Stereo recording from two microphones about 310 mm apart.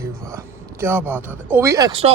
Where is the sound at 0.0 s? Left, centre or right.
Centre.